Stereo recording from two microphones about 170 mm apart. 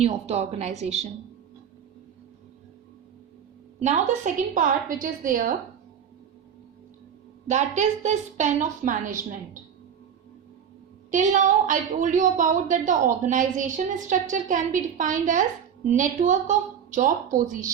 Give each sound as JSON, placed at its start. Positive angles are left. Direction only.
{"t": 0.0, "sound": "a woman's voice", "side_deg": -40}
{"t": 3.8, "sound": "speech", "side_deg": -45}
{"t": 7.4, "sound": "speech", "side_deg": -45}
{"t": 11.1, "sound": "speech", "side_deg": -50}